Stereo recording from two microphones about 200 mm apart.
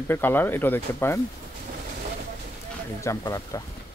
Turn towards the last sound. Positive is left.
turn(degrees=15)  # may be behind; listen again after turning